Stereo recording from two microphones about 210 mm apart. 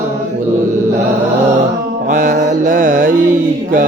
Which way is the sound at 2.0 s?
40° right (ahead or behind).